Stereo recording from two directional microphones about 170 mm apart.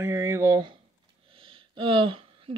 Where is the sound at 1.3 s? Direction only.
30° right (ahead or behind).